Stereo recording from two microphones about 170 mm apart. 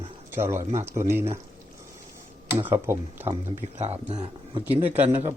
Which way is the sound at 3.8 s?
40° right (ahead or behind).